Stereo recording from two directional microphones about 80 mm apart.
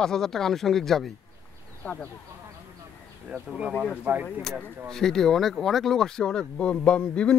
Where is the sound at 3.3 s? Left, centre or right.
Centre.